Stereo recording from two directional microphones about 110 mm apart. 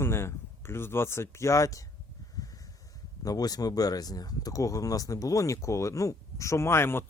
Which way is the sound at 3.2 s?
35° left (ahead or behind).